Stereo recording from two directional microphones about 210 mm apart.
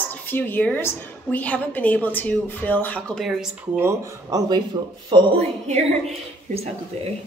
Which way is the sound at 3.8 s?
15° right (ahead or behind).